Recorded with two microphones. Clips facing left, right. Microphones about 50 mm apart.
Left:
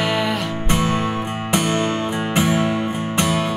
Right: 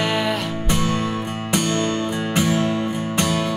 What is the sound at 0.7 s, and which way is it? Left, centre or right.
Music, left.